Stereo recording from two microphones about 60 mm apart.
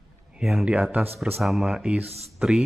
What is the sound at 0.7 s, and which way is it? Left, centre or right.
Speech, centre.